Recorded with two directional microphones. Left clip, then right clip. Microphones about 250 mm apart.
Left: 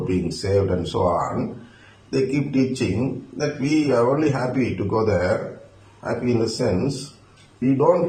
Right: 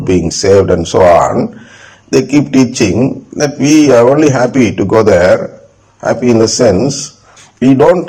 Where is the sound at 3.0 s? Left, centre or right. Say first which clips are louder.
Right 13 dB; right.